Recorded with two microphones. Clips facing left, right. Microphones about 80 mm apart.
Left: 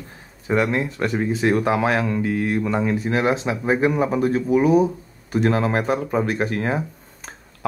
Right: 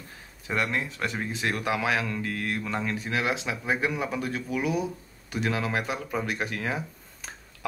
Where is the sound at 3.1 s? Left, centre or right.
Left.